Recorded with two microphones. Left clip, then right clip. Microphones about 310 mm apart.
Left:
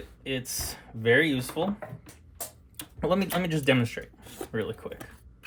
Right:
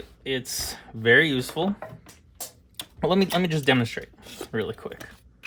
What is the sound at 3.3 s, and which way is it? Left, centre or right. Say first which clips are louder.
Speech: right 3 dB; right.